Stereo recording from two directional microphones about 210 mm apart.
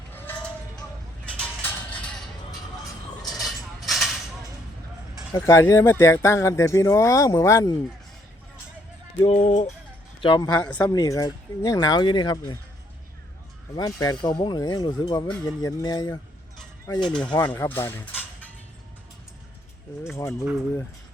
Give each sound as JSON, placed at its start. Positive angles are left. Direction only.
{"t": 0.1, "sound": "a sound", "side_deg": 10}
{"t": 3.3, "sound": "a sound", "side_deg": 0}
{"t": 5.3, "sound": "speech", "side_deg": 15}
{"t": 9.2, "sound": "a man's voice", "side_deg": 25}
{"t": 10.6, "sound": "speech", "side_deg": 5}
{"t": 10.9, "sound": "speech", "side_deg": 15}
{"t": 13.7, "sound": "speech", "side_deg": 15}
{"t": 17.0, "sound": "speech", "side_deg": 5}
{"t": 20.1, "sound": "speech", "side_deg": 15}